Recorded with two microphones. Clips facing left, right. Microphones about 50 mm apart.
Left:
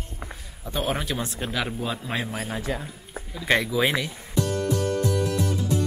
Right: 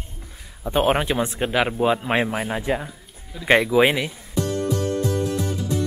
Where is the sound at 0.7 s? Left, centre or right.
Right.